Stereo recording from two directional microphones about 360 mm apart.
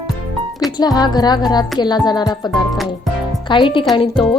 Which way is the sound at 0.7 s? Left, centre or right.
Centre.